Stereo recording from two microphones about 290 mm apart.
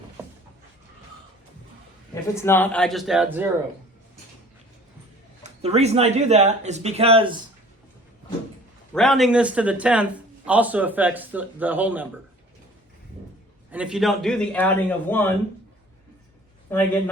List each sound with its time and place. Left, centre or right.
2.3 s a man's voice: centre
5.4 s speech: right
8.9 s a man's voice: centre
13.7 s a man's voice: centre
16.6 s a man's voice: centre